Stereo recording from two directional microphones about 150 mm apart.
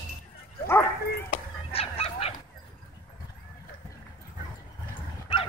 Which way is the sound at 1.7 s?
40° left (ahead or behind).